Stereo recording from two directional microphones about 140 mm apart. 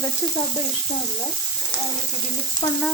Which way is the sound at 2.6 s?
30° left (ahead or behind).